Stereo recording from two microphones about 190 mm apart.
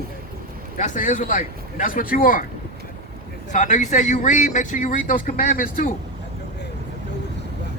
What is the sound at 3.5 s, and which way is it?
A man's voice, 40° left (ahead or behind).